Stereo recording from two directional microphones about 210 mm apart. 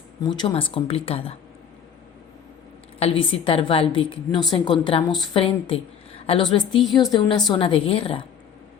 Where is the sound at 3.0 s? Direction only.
25° left (ahead or behind).